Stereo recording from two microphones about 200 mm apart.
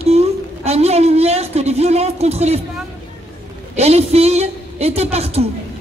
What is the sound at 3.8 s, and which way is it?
A man's voice, 30° right (ahead or behind).